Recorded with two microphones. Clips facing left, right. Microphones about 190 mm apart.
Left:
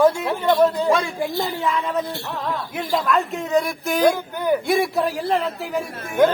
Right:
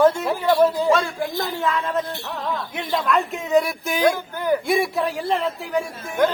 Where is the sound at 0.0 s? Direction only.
Centre (ahead or behind).